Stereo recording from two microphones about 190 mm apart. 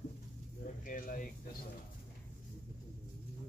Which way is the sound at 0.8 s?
45° left (ahead or behind).